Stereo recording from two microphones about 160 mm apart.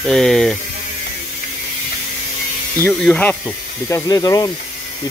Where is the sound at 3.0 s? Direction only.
5° left (ahead or behind).